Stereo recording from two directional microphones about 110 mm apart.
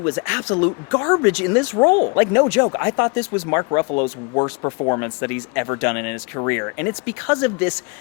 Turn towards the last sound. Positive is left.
turn(degrees=20)  # may be behind; listen again after turning